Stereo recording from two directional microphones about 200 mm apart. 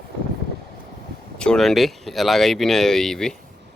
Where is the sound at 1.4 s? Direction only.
5° left (ahead or behind).